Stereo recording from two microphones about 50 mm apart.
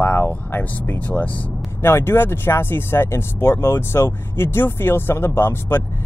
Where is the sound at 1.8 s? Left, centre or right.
Left.